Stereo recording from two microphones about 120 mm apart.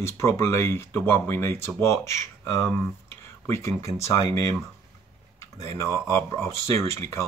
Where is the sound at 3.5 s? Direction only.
25° left (ahead or behind).